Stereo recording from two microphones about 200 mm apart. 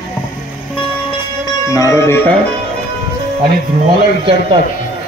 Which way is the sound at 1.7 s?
15° left (ahead or behind).